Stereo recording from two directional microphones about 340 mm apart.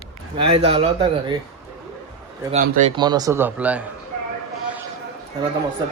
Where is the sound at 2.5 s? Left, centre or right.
Centre.